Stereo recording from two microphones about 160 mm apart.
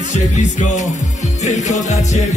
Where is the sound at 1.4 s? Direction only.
50° left (ahead or behind).